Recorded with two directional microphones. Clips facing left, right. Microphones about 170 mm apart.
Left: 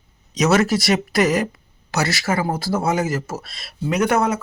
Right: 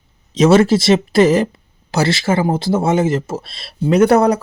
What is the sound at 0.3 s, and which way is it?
Speech, 30° right (ahead or behind).